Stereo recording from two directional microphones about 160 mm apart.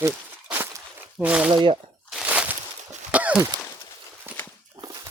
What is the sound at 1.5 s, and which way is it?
Speech, 30° right (ahead or behind).